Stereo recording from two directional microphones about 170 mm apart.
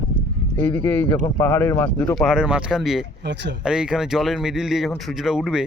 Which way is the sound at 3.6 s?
5° right (ahead or behind).